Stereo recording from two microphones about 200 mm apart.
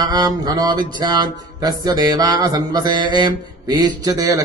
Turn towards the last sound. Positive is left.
turn(degrees=-15)  # may be behind; listen again after turning